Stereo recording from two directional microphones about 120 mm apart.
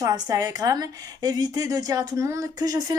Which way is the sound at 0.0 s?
30° right (ahead or behind).